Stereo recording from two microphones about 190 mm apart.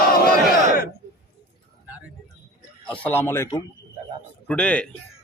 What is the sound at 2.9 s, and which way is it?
A man's voice, 10° left (ahead or behind).